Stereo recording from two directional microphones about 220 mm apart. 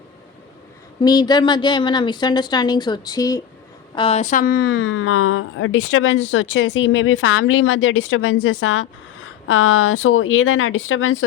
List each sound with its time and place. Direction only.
0.9 s a woman's voice: 20° left (ahead or behind)
3.9 s speech: 25° left (ahead or behind); by 11.3 s 65° left (ahead or behind)